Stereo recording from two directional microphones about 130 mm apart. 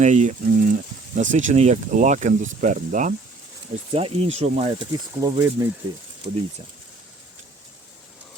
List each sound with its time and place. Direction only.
0.0 s speech: 65° right (ahead or behind); by 3.2 s 85° right
3.9 s speech: 50° right (ahead or behind)
4.9 s speech: 25° right (ahead or behind)